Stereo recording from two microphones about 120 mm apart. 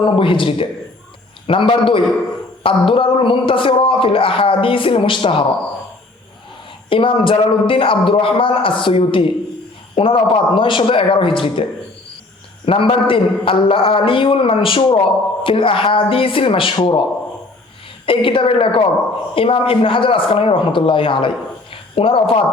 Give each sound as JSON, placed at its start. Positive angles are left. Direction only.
{"t": 0.0, "sound": "a man's voice", "side_deg": 45}
{"t": 6.9, "sound": "a man's voice", "side_deg": 45}
{"t": 12.6, "sound": "a man's voice", "side_deg": 45}
{"t": 18.0, "sound": "a man's voice", "side_deg": 45}